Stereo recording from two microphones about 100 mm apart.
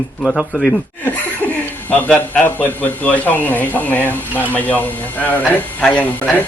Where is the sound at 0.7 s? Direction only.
20° left (ahead or behind).